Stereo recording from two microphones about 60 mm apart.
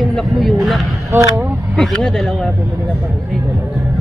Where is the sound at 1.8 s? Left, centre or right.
Centre.